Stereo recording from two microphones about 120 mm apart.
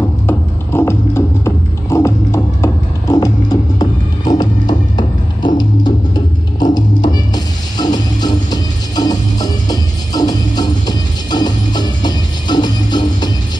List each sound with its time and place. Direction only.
0.3 s music: 20° left (ahead or behind); by 13.3 s 35° left (ahead or behind)